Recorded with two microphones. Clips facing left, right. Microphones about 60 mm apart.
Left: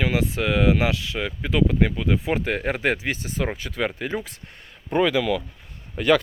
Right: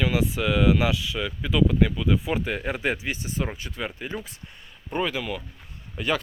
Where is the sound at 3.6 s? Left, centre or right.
Left.